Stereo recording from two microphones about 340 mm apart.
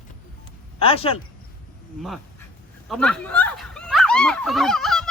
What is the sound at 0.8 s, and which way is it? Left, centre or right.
Speech, centre.